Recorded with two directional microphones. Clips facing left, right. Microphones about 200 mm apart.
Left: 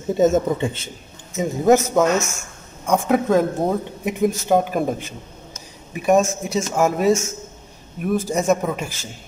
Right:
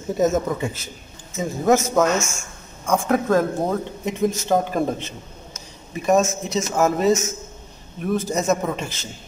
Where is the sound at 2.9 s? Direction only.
15° left (ahead or behind).